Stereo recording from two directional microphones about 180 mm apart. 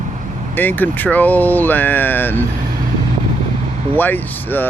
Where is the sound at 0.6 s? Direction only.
10° left (ahead or behind).